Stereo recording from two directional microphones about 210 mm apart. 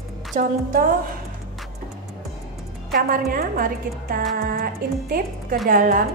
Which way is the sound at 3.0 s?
45° right (ahead or behind).